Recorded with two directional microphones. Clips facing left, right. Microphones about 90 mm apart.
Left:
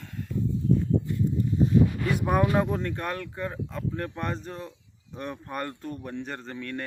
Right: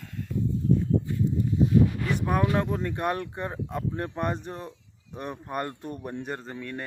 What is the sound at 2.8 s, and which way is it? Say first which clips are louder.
Speech: right 1 dB; 10° right (ahead or behind).